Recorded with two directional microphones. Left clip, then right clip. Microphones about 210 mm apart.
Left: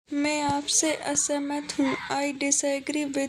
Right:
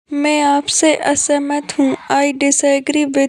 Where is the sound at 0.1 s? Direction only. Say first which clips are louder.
Right 12 dB; 40° right (ahead or behind).